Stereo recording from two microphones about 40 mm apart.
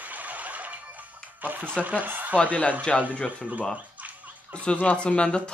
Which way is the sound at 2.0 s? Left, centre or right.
Right.